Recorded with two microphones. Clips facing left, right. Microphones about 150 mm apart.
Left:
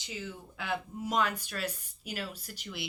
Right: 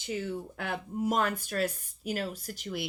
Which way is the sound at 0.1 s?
55° right (ahead or behind).